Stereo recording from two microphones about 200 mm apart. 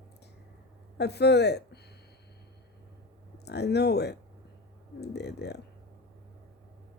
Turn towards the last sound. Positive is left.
turn(degrees=55)  # may be behind; listen again after turning